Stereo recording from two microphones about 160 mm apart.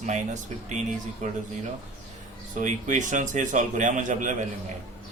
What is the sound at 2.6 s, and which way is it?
Speech, 50° right (ahead or behind).